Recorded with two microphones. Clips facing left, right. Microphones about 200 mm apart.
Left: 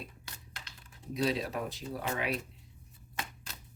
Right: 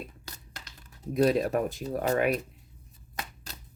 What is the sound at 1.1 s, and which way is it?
Speech, 50° right (ahead or behind).